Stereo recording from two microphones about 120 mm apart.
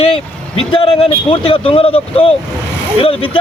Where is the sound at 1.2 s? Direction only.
45° left (ahead or behind).